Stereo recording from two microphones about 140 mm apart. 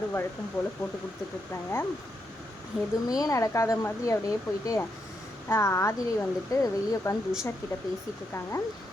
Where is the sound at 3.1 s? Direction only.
25° left (ahead or behind).